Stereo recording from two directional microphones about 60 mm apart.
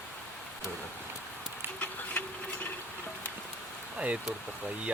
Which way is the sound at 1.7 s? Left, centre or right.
Left.